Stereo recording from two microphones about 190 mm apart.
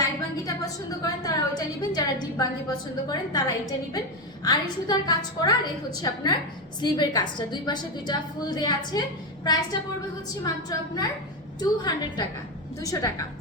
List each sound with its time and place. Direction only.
0.4 s a woman's voice: 20° left (ahead or behind)